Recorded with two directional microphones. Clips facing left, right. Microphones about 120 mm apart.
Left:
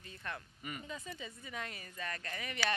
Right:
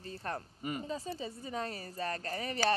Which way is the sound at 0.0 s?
35° right (ahead or behind).